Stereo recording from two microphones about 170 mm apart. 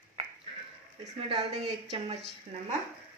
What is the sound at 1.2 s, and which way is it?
Speech, 35° right (ahead or behind).